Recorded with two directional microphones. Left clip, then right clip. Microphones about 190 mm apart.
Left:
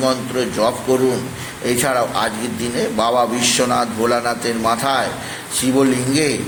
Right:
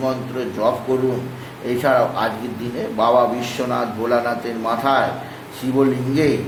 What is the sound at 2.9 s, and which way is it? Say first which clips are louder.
A man's voice: right 2 dB; 20° left (ahead or behind).